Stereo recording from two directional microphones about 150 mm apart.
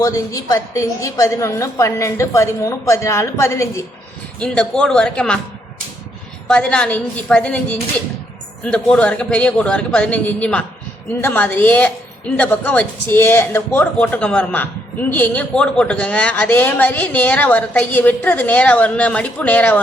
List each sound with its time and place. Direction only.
0.0 s a woman's voice: 20° left (ahead or behind)
4.4 s speech: 5° left (ahead or behind)
6.5 s speech: 5° left (ahead or behind)